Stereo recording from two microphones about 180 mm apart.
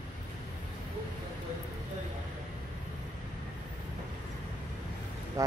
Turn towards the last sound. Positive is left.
turn(degrees=-20)  # may be behind; listen again after turning